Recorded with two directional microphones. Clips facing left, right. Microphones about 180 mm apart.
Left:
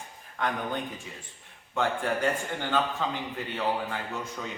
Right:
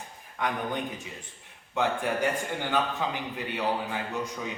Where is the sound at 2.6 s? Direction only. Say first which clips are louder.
Even; 15° right (ahead or behind).